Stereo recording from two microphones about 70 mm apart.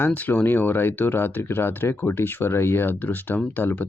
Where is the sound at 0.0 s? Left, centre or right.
Left.